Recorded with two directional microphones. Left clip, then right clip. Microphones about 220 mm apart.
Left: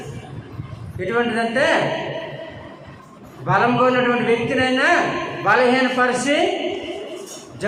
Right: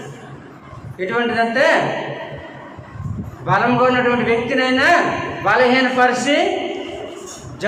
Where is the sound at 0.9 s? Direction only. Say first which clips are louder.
Right 2 dB; 10° left (ahead or behind).